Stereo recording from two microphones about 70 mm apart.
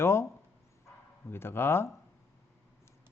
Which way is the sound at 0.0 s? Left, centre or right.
Left.